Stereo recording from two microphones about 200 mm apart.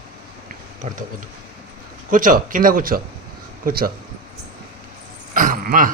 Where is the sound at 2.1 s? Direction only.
40° right (ahead or behind).